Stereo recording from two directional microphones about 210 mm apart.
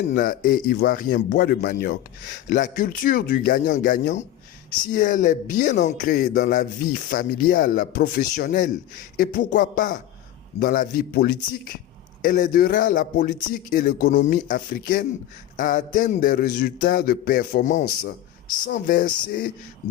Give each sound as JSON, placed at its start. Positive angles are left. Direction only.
{"t": 0.1, "sound": "speech", "side_deg": 40}